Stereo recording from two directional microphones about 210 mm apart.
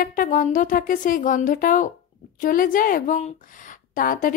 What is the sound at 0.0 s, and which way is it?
A woman's voice, 40° left (ahead or behind).